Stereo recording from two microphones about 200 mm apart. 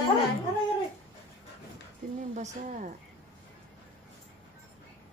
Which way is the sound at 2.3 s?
35° right (ahead or behind).